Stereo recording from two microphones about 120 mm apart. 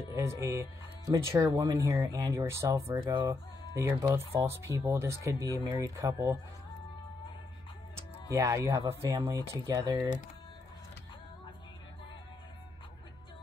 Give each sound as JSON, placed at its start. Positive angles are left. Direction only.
{"t": 0.1, "sound": "speech", "side_deg": -25}
{"t": 8.3, "sound": "speech", "side_deg": -25}